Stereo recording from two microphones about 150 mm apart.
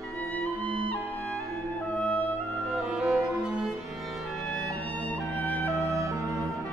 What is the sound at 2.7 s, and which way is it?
Music, 5° right (ahead or behind).